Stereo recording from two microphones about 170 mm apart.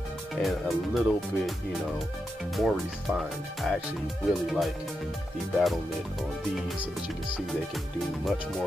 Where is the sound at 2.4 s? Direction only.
Centre (ahead or behind).